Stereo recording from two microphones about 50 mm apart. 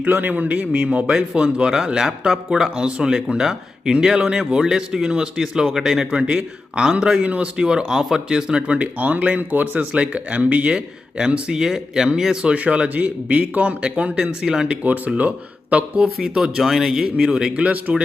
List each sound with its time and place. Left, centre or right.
0.0 s speech: right; by 6.1 s centre
6.1 s speech: centre
12.5 s speech: right
14.4 s speech: centre
15.7 s speech: right
16.2 s speech: centre
17.7 s speech: right